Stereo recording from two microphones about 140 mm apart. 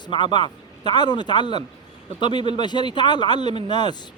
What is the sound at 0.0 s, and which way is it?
A man's voice, 35° left (ahead or behind).